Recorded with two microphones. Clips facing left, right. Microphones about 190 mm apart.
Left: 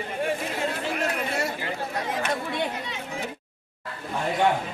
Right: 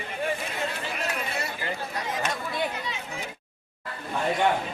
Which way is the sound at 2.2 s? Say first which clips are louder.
Left 3 dB; 60° left (ahead or behind).